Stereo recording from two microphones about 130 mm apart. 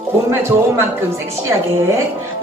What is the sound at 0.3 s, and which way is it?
Speech, 20° right (ahead or behind).